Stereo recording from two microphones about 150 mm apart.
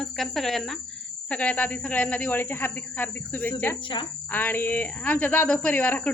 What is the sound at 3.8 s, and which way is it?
Speech, 35° left (ahead or behind).